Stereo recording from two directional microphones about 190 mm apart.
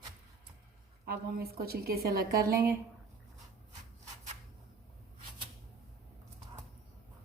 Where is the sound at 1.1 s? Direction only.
55° right (ahead or behind).